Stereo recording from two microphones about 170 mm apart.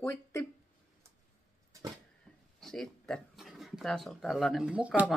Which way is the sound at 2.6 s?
5° left (ahead or behind).